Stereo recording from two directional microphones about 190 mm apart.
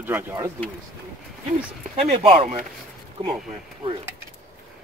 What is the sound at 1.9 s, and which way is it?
Speech, 30° right (ahead or behind).